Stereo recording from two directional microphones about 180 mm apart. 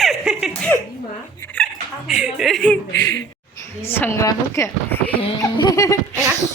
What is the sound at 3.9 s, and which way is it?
Speech, 15° left (ahead or behind).